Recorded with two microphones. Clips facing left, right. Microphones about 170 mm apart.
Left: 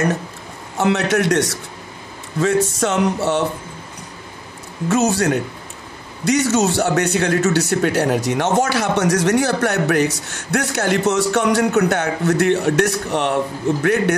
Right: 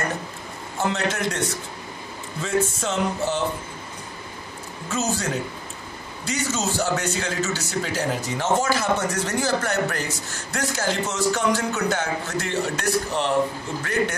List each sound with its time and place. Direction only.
0.7 s a man's voice: 75° left (ahead or behind)
4.8 s a man's voice: 75° left (ahead or behind)